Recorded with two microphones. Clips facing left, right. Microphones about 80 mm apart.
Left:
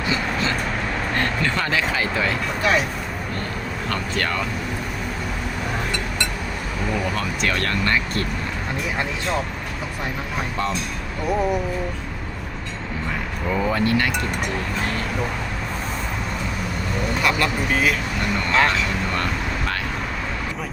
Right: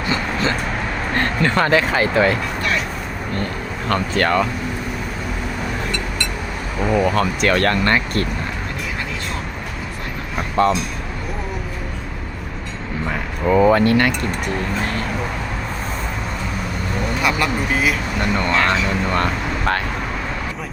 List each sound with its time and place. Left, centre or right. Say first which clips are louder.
1.1 s speech: right 6 dB; right
3.8 s speech: right 7 dB; right
7.2 s speech: right 7 dB; right
10.6 s speech: right 10 dB; right
13.5 s speech: right 8 dB; right
17.2 s speech: right 2 dB; centre
18.4 s speech: even; right